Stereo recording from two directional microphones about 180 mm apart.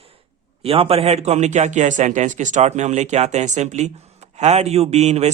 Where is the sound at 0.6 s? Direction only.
35° right (ahead or behind).